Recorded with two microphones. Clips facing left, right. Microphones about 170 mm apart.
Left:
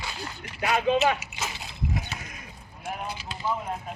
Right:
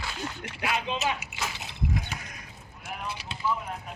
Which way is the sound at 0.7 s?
55° left (ahead or behind).